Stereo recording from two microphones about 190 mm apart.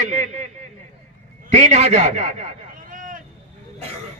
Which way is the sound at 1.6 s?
35° right (ahead or behind).